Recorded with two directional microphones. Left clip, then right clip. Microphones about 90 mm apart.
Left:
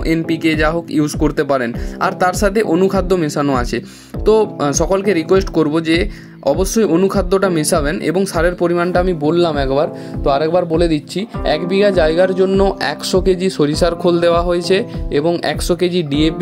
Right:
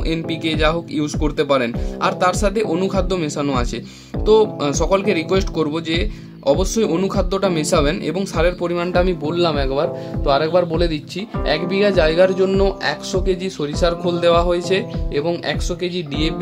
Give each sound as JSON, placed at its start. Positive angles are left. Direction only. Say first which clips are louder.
{"t": 0.0, "sound": "speech", "louder": "left 6 dB", "side_deg": 55}
{"t": 8.5, "sound": "speech", "louder": "left 6 dB", "side_deg": 35}
{"t": 9.2, "sound": "speech", "louder": "left 4 dB", "side_deg": 50}
{"t": 13.1, "sound": "speech", "louder": "left 6 dB", "side_deg": 90}
{"t": 15.9, "sound": "speech", "louder": "left 6 dB", "side_deg": 75}